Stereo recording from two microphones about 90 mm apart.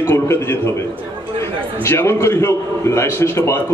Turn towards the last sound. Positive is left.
turn(degrees=30)  # may be behind; listen again after turning